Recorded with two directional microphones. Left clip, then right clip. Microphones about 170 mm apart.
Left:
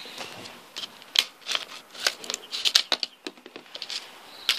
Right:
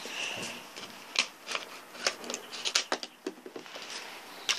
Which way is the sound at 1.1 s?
Centre (ahead or behind).